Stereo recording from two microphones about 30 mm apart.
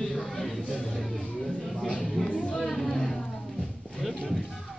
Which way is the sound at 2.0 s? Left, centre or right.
Centre.